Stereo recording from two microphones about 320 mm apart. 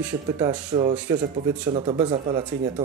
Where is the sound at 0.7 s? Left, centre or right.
Centre.